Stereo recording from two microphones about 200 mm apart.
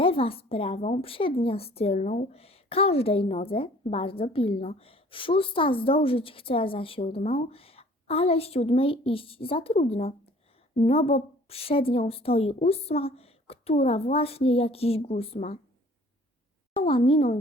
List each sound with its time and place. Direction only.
0.0 s a woman's voice: 30° left (ahead or behind)
16.7 s a woman's voice: 25° left (ahead or behind)